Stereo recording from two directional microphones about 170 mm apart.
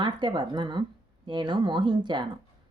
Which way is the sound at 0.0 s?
25° right (ahead or behind).